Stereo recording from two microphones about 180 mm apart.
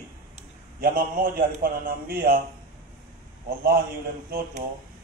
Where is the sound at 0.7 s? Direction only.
55° right (ahead or behind).